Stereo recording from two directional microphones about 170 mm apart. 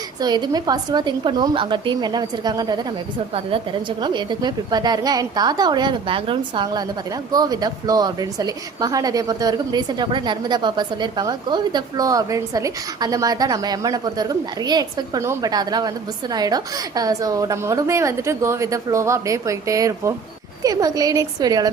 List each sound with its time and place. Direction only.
0.2 s a woman's voice: 25° right (ahead or behind)